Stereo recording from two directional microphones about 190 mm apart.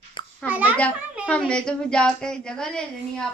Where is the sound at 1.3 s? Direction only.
5° left (ahead or behind).